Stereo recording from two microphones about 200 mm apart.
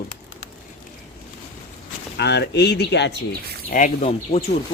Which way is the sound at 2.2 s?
55° left (ahead or behind).